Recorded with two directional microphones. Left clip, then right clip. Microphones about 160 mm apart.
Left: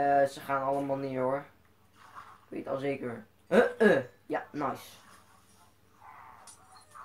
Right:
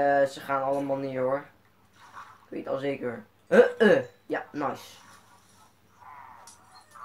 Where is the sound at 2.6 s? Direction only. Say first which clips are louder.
Right 3 dB; 5° right (ahead or behind).